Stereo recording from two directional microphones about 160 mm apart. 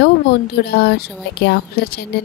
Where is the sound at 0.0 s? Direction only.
90° left.